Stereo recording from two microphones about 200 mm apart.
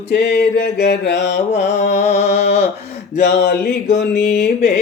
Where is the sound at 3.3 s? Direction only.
55° left (ahead or behind).